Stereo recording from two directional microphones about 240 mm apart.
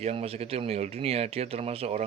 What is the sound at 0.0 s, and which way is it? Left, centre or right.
Speech, right.